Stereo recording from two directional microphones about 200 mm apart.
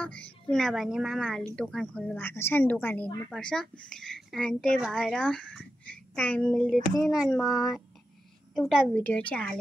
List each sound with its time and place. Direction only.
0.0 s a woman's voice: 5° left (ahead or behind)